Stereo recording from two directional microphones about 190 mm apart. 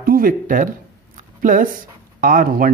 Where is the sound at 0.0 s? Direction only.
50° right (ahead or behind).